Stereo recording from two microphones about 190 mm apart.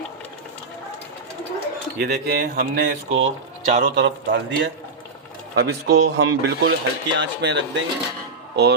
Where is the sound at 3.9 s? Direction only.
70° right (ahead or behind).